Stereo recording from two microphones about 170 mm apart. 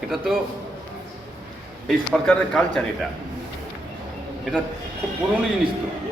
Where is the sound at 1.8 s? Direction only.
Centre (ahead or behind).